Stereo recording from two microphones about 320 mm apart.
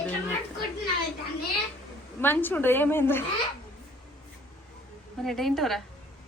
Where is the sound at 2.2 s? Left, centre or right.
Centre.